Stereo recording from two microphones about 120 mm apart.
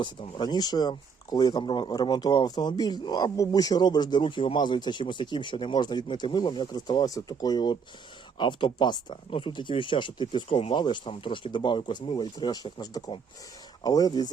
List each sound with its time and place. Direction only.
0.0 s speech: 40° left (ahead or behind)